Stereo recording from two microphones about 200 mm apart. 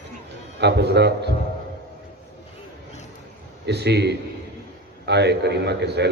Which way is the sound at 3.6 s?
55° right (ahead or behind).